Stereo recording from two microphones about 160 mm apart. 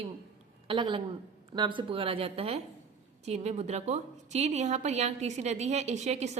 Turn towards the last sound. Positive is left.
turn(degrees=-45)  # may be behind; listen again after turning